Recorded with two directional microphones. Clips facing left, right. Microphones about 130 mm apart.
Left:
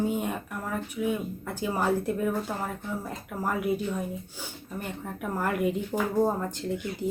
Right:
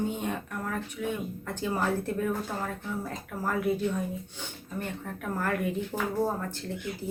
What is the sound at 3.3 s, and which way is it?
Speech, 15° left (ahead or behind).